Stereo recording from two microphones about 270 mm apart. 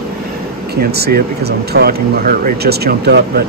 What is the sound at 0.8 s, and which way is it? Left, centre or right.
Speech, right.